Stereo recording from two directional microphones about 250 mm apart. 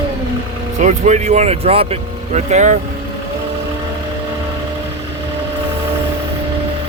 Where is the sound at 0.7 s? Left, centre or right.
Right.